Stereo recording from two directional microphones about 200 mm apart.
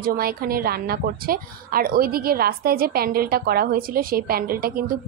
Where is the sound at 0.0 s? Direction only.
50° right (ahead or behind).